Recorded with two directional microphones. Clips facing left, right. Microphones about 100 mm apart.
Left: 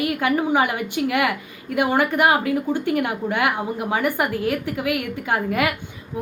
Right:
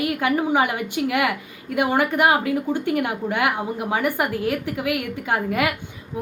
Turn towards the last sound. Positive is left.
turn(degrees=-15)  # may be behind; listen again after turning